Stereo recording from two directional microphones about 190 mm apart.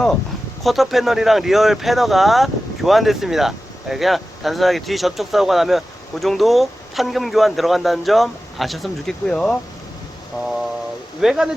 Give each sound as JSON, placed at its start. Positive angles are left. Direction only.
{"t": 0.6, "sound": "speech", "side_deg": 0}
{"t": 10.3, "sound": "a sound", "side_deg": 15}
{"t": 11.2, "sound": "speech", "side_deg": 0}